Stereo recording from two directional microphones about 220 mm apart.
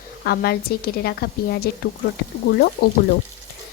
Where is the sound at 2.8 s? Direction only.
45° left (ahead or behind).